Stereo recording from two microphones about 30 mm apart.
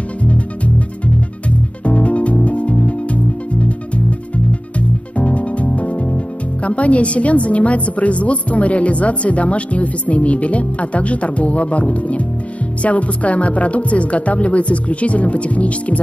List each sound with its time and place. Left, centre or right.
0.3 s music: left
6.6 s a woman's voice: left